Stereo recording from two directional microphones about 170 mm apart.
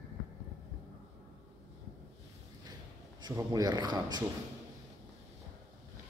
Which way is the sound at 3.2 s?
20° right (ahead or behind).